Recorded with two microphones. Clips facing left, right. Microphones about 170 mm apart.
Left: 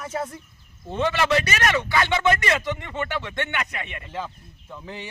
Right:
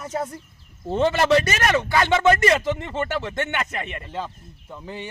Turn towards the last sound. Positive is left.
turn(degrees=-5)  # may be behind; listen again after turning